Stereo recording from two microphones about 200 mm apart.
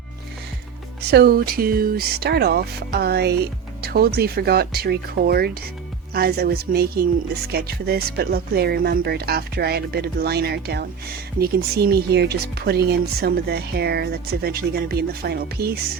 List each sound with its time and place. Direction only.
1.1 s speech: 50° right (ahead or behind)